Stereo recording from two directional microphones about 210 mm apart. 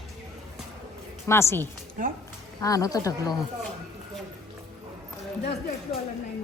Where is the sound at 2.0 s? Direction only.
40° right (ahead or behind).